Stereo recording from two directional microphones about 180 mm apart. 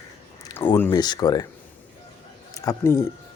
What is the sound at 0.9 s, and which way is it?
Speech, 25° left (ahead or behind).